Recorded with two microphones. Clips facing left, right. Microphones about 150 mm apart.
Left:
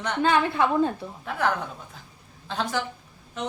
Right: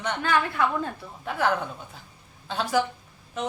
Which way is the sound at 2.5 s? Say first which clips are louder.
Right 3 dB; 5° right (ahead or behind).